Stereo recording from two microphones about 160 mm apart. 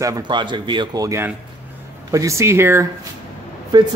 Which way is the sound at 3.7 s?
30° right (ahead or behind).